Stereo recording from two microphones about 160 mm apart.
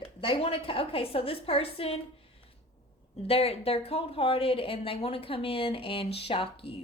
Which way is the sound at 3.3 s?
35° left (ahead or behind).